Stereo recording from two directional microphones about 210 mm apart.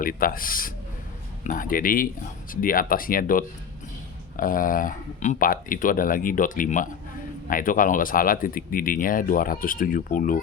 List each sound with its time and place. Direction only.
0.0 s speech: 45° left (ahead or behind)